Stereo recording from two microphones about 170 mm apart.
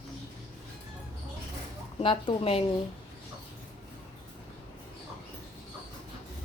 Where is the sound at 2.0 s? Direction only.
30° left (ahead or behind).